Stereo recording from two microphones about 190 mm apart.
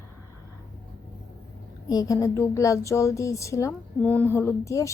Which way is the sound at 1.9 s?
20° left (ahead or behind).